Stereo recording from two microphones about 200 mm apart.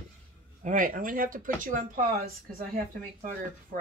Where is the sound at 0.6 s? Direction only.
40° right (ahead or behind).